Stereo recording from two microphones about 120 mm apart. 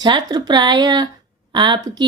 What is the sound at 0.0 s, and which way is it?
A woman's voice, 35° right (ahead or behind).